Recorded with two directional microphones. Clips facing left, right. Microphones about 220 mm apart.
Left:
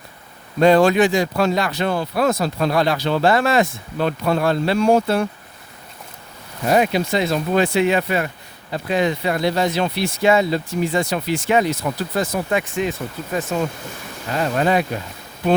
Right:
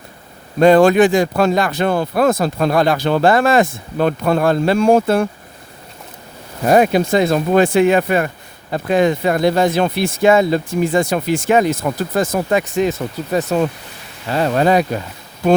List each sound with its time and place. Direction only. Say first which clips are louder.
0.6 s speech: right 4 dB; 50° right (ahead or behind)
6.7 s speech: right 5 dB; 50° right (ahead or behind)